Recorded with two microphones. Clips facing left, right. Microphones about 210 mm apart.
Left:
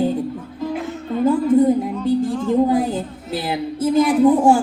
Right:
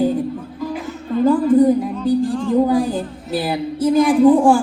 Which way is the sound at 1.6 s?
25° left (ahead or behind).